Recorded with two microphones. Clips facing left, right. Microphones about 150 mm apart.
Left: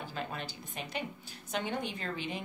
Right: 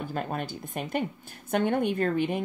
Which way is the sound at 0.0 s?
50° right (ahead or behind).